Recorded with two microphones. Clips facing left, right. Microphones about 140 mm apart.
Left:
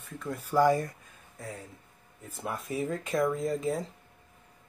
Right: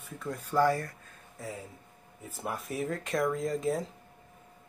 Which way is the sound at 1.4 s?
Centre (ahead or behind).